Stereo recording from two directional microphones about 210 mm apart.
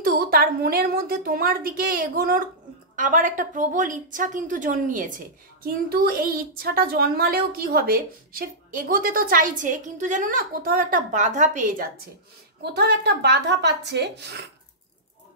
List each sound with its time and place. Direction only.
0.0 s a woman's voice: 45° right (ahead or behind)
12.6 s a woman's voice: 50° right (ahead or behind)